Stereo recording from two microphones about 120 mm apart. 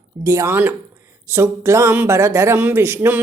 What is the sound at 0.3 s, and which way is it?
Speech, 25° right (ahead or behind).